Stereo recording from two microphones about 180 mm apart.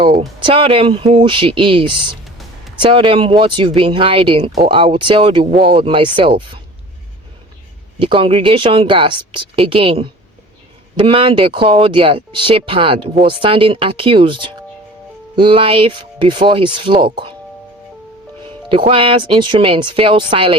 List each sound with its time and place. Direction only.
0.3 s speech: 30° right (ahead or behind)
7.9 s speech: 30° right (ahead or behind)
18.4 s speech: 30° right (ahead or behind)